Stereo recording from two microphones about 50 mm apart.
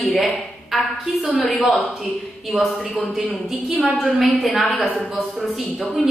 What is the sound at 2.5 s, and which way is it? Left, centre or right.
Speech, centre.